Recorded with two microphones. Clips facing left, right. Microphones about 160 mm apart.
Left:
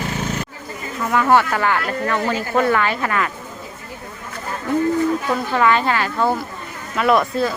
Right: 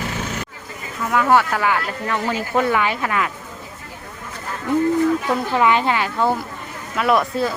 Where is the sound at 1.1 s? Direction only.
5° right (ahead or behind).